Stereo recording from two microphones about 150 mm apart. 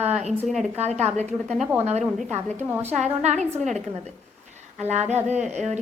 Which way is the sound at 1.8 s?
50° right (ahead or behind).